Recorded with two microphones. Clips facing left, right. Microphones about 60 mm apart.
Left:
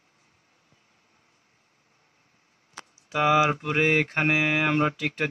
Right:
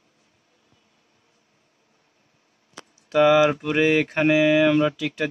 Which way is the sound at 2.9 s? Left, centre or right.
Left.